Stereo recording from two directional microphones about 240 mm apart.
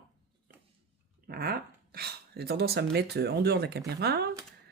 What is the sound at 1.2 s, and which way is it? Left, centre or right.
Speech, right.